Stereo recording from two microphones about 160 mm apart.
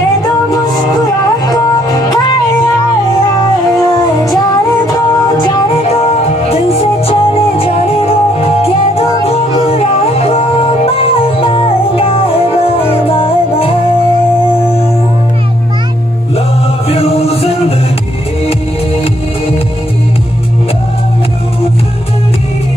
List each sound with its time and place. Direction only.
1.5 s music: 25° left (ahead or behind)
5.9 s music: 40° left (ahead or behind)
16.9 s music: 40° left (ahead or behind)